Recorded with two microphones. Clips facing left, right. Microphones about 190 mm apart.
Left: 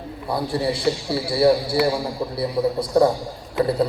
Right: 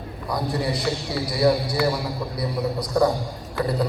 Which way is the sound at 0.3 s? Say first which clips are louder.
Left 2 dB; 30° left (ahead or behind).